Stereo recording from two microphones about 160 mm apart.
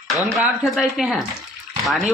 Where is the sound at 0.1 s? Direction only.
Centre (ahead or behind).